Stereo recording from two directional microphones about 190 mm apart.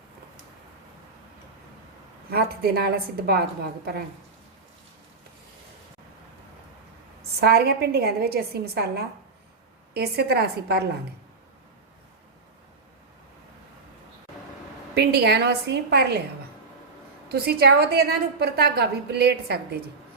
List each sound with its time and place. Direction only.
2.3 s a woman's voice: 55° right (ahead or behind)
7.3 s a woman's voice: 55° right (ahead or behind)
14.9 s a woman's voice: 55° right (ahead or behind)
17.2 s a woman's voice: 55° right (ahead or behind)